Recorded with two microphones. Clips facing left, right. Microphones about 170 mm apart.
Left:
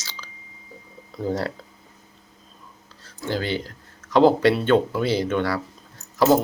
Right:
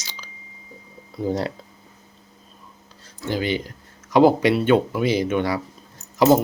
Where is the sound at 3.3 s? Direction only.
15° right (ahead or behind).